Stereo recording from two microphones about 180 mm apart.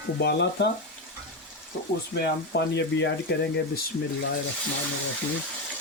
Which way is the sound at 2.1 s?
65° left (ahead or behind).